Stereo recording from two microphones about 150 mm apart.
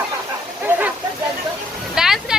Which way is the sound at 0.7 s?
10° right (ahead or behind).